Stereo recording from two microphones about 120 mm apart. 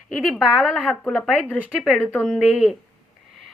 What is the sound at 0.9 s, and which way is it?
A woman's voice, 5° left (ahead or behind).